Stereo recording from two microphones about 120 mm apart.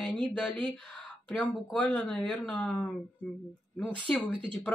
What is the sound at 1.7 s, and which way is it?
Speech, 10° left (ahead or behind).